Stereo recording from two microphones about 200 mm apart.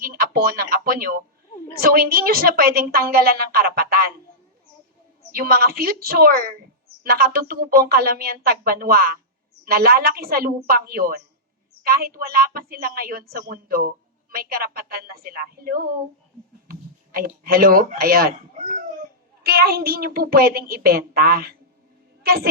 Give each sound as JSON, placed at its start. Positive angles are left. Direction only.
{"t": 0.0, "sound": "a woman's voice", "side_deg": -50}
{"t": 5.3, "sound": "a woman's voice", "side_deg": -50}
{"t": 19.4, "sound": "a woman's voice", "side_deg": -50}